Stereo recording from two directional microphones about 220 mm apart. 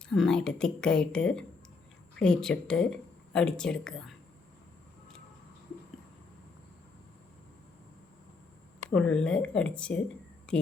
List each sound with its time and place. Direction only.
0.1 s speech: centre (ahead or behind)
8.9 s a woman's voice: 5° left (ahead or behind)